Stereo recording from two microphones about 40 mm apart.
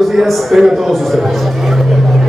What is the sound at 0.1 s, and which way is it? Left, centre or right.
A man's voice, centre.